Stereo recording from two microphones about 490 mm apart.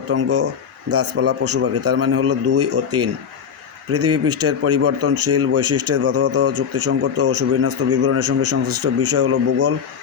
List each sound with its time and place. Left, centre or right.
0.1 s speech: right